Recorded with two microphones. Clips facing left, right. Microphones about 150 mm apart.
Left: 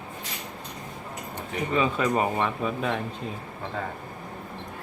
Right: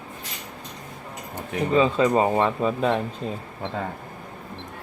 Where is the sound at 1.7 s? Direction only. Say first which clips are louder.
Right 5 dB; 25° right (ahead or behind).